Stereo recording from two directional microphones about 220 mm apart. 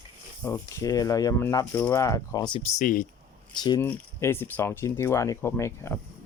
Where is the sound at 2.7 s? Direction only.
35° left (ahead or behind).